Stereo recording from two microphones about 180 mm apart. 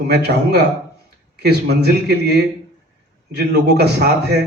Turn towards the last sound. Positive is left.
turn(degrees=-65)  # may be behind; listen again after turning